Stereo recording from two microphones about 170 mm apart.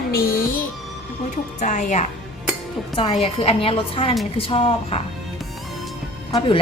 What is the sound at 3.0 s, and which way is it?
A woman's voice, 35° left (ahead or behind).